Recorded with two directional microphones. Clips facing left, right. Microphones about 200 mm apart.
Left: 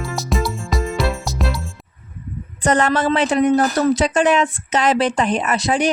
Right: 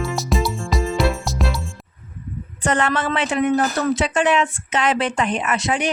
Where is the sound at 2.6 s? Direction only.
40° left (ahead or behind).